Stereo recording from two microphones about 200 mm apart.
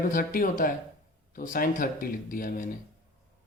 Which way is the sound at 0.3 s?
45° left (ahead or behind).